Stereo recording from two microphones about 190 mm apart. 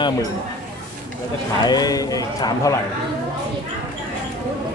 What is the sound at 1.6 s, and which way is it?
A man's voice, 20° left (ahead or behind).